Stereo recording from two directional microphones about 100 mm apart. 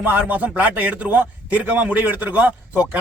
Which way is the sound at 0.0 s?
15° right (ahead or behind).